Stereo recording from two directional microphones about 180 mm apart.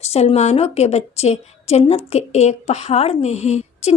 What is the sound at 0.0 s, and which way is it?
A woman's voice, 35° left (ahead or behind).